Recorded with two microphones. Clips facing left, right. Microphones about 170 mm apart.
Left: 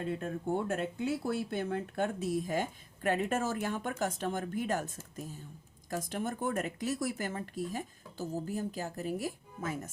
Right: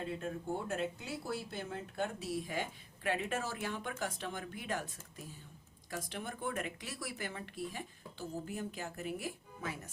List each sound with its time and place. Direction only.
0.7 s speech: 55° left (ahead or behind)